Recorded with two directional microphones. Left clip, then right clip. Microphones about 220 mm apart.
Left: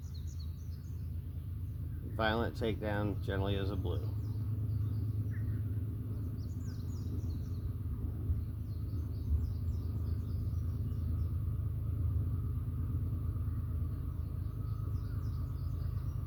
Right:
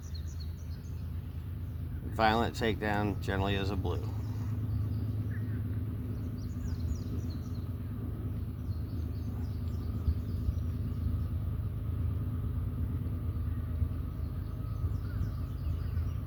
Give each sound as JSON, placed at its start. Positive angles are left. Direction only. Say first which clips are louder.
{"t": 2.1, "sound": "speech", "louder": "right 6 dB", "side_deg": -35}